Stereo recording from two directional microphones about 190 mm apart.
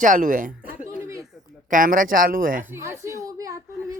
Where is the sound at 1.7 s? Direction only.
45° right (ahead or behind).